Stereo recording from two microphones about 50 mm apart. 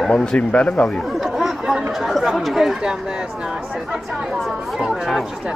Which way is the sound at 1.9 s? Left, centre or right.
Centre.